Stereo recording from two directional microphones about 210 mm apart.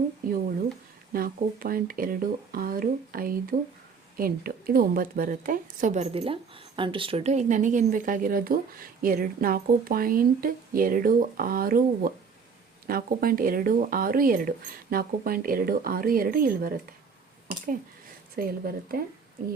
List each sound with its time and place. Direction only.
1.1 s a woman's voice: 45° right (ahead or behind)
18.3 s speech: 45° right (ahead or behind)